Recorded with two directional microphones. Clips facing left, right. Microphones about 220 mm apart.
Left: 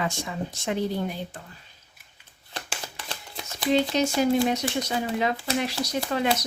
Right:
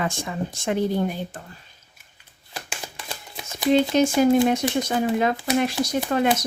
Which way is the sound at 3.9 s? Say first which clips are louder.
Right 5 dB; 50° right (ahead or behind).